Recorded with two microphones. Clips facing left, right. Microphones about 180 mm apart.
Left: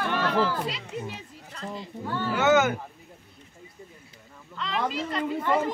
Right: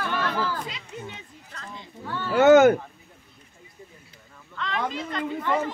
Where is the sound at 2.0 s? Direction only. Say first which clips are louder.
Left 2 dB; 15° left (ahead or behind).